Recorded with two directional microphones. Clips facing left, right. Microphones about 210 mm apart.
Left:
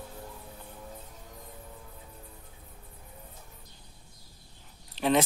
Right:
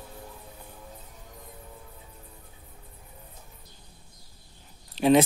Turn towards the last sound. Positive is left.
turn(degrees=-15)  # may be behind; listen again after turning